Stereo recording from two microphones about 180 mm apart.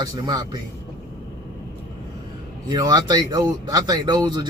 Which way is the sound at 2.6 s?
25° right (ahead or behind).